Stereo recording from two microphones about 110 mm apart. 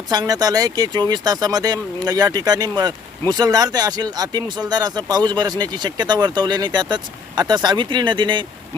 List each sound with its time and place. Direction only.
0.1 s speech: 35° right (ahead or behind)